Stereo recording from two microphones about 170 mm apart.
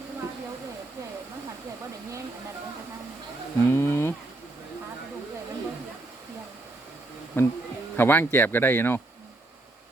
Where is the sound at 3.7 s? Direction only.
15° left (ahead or behind).